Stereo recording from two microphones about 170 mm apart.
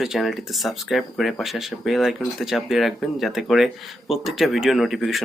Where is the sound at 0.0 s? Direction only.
Centre (ahead or behind).